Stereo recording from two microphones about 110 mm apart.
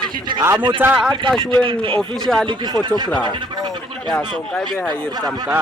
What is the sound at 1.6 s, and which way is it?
Speech, 50° right (ahead or behind).